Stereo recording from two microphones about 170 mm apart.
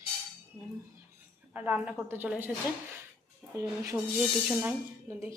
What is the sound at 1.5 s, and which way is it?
A woman's voice, 10° right (ahead or behind).